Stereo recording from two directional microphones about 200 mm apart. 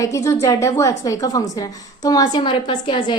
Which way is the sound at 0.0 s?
15° left (ahead or behind).